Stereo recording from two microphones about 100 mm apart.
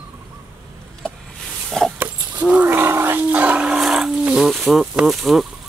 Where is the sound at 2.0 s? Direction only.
15° right (ahead or behind); by 4.8 s centre (ahead or behind).